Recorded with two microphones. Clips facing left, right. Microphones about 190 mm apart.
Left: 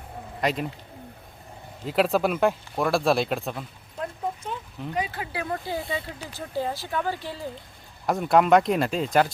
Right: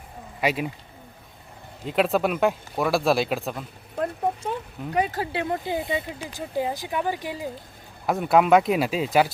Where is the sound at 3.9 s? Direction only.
65° right (ahead or behind).